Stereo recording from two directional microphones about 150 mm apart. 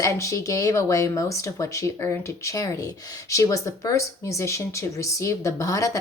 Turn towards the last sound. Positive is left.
turn(degrees=20)  # may be behind; listen again after turning